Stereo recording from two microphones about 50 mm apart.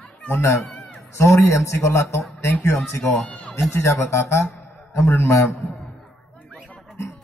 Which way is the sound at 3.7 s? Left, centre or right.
Left.